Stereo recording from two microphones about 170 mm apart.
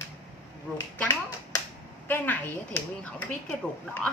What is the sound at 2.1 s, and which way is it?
Speech, 10° left (ahead or behind).